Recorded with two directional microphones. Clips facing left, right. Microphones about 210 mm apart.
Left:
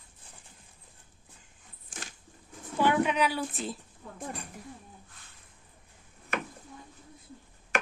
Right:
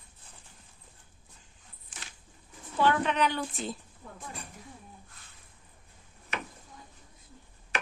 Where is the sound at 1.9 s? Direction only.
45° left (ahead or behind).